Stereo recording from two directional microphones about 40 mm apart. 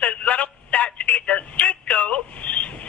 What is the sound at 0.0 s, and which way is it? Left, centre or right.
Telephone, left.